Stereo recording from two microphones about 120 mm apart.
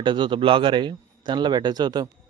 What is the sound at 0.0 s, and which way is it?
A man's voice, 45° right (ahead or behind).